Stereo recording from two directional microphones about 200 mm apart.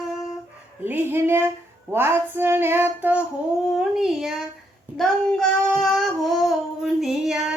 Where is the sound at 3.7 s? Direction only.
Centre (ahead or behind).